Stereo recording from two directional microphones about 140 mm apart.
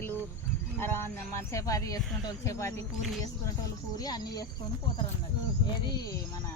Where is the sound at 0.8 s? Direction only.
15° left (ahead or behind).